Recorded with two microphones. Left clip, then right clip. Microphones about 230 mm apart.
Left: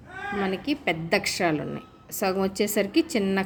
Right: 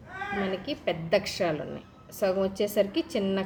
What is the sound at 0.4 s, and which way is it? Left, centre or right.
A woman's voice, left.